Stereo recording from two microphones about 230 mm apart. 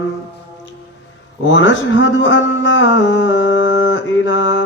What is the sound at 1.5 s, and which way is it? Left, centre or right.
A man's voice, left.